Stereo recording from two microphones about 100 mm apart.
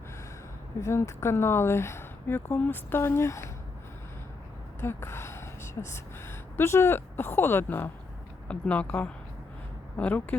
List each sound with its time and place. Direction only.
0.8 s speech: 25° left (ahead or behind)
4.8 s a woman's voice: 25° left (ahead or behind)